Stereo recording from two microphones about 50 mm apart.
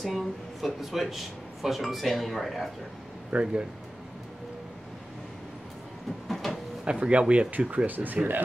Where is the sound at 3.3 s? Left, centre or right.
Centre.